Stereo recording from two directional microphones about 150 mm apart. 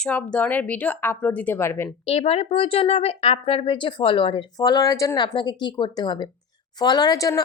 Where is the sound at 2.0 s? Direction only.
40° left (ahead or behind).